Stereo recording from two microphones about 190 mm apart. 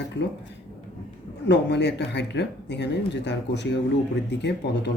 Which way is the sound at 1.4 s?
65° left (ahead or behind).